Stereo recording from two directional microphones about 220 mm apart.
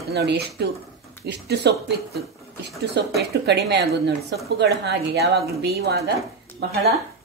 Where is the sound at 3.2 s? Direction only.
50° right (ahead or behind).